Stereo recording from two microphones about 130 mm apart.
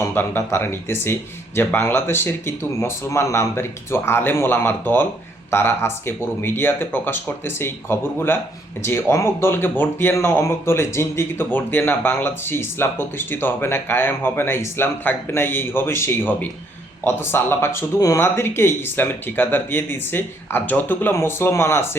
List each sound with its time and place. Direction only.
0.0 s speech: 15° left (ahead or behind)